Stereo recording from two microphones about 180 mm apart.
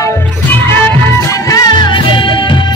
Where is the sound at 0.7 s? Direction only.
15° left (ahead or behind).